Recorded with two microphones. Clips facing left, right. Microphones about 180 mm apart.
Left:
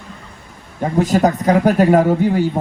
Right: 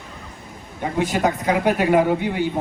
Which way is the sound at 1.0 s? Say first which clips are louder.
Left 6 dB; 40° left (ahead or behind).